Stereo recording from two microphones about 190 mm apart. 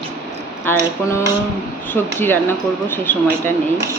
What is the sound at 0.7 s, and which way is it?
Speech, 10° left (ahead or behind).